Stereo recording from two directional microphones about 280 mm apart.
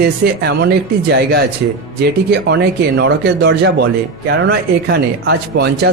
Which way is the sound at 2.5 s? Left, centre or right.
Right.